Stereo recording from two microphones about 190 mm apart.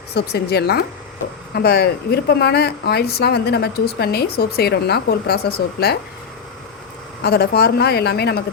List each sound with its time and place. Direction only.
0.1 s speech: 60° left (ahead or behind)
7.2 s speech: 60° left (ahead or behind)